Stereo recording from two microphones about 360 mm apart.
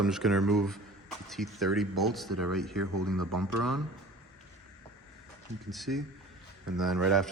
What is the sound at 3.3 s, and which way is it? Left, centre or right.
Speech, right.